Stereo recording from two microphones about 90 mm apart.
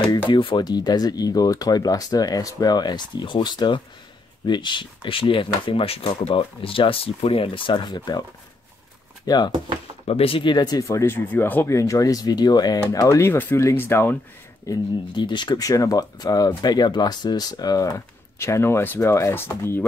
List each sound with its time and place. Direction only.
0.3 s speech: 65° left (ahead or behind)
9.2 s speech: 50° left (ahead or behind)
10.1 s speech: 90° left; by 10.8 s 55° left (ahead or behind)
10.8 s speech: 35° left (ahead or behind)
11.1 s speech: 25° left (ahead or behind)
11.7 s speech: 35° left (ahead or behind)
13.2 s speech: 25° left (ahead or behind)
14.7 s speech: 40° left (ahead or behind)
15.1 s speech: 60° left (ahead or behind)
15.5 s speech: 40° left (ahead or behind)